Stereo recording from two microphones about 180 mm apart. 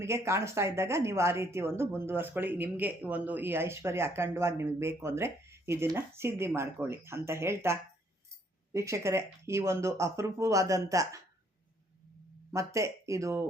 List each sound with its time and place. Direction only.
0.0 s a woman's voice: 15° right (ahead or behind)
12.5 s speech: 15° right (ahead or behind)